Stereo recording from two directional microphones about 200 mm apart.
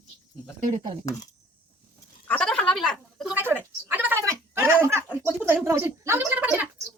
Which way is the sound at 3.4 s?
10° right (ahead or behind).